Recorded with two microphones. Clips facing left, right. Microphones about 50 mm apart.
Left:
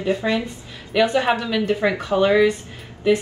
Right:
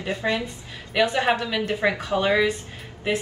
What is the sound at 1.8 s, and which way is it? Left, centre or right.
Speech, centre.